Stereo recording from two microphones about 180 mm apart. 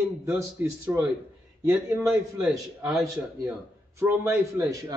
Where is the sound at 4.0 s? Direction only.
15° right (ahead or behind).